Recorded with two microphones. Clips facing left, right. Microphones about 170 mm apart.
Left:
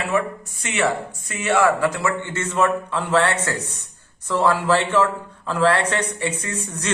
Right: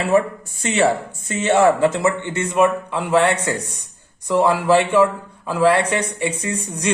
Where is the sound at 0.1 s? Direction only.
30° right (ahead or behind).